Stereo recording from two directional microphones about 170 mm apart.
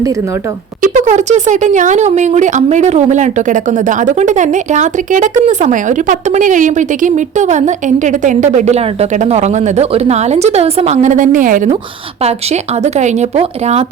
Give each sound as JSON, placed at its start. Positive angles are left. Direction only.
{"t": 0.8, "sound": "speech", "side_deg": -45}
{"t": 12.8, "sound": "a woman's voice", "side_deg": -40}